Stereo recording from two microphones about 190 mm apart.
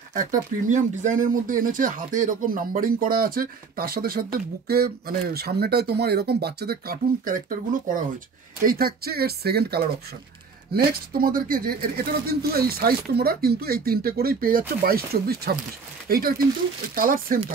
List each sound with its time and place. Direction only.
0.1 s speech: 40° right (ahead or behind)